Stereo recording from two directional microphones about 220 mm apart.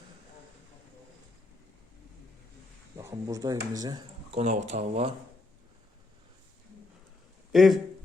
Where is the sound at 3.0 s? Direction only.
15° right (ahead or behind).